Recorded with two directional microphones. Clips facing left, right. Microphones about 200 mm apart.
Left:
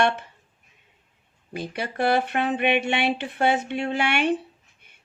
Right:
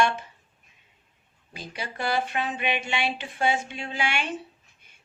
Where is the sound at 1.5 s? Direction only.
60° left (ahead or behind).